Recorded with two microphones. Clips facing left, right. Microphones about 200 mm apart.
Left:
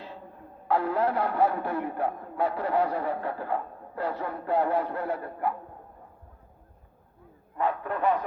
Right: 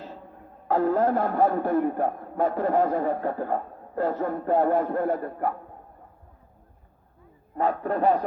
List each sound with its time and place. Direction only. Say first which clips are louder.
0.7 s speech: right 4 dB; 45° right (ahead or behind)
7.5 s speech: right 4 dB; 40° right (ahead or behind)